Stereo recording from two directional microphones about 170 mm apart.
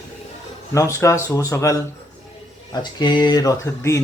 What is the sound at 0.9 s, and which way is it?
Speech, 15° left (ahead or behind).